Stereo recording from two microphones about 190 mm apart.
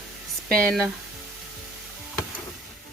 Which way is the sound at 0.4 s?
5° left (ahead or behind).